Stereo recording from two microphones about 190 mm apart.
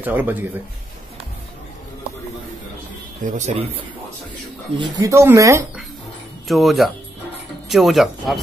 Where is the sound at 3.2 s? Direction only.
40° right (ahead or behind).